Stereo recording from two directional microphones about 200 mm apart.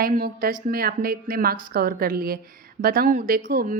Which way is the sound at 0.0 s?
45° right (ahead or behind).